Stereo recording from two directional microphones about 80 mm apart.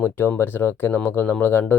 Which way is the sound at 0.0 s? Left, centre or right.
Left.